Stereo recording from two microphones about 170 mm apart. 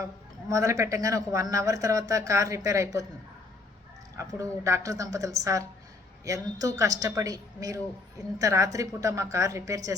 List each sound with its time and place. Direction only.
0.0 s speech: 20° right (ahead or behind)
4.2 s speech: 20° right (ahead or behind)